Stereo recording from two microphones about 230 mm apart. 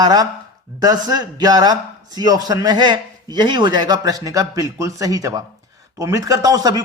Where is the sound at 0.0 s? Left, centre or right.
Centre.